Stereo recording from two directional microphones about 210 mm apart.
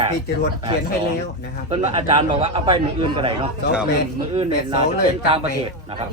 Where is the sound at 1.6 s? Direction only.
30° right (ahead or behind).